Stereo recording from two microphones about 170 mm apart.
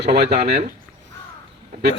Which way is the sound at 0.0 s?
80° right.